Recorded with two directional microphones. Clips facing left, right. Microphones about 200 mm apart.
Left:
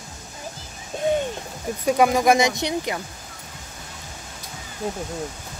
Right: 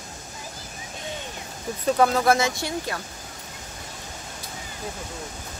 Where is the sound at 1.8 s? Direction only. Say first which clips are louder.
Left 2 dB; 10° left (ahead or behind).